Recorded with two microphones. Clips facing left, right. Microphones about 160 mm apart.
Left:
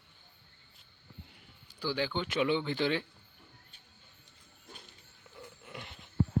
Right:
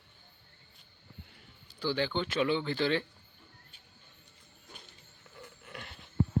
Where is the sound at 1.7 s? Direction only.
10° left (ahead or behind).